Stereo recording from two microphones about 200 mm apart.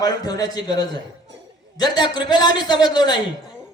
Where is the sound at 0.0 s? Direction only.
20° left (ahead or behind).